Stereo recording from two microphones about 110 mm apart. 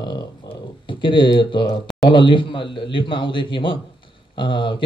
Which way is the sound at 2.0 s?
45° left (ahead or behind).